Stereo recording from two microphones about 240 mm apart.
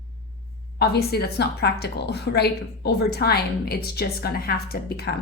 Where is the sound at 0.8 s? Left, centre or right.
Left.